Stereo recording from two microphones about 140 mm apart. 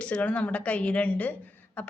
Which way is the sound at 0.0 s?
10° left (ahead or behind).